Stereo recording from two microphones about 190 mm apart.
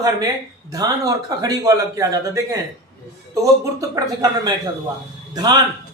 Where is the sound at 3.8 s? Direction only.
20° right (ahead or behind).